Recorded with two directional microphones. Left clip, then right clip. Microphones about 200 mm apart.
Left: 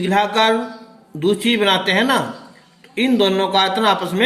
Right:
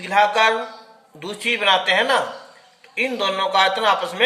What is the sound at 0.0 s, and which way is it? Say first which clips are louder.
A man's voice: even; 15° left (ahead or behind).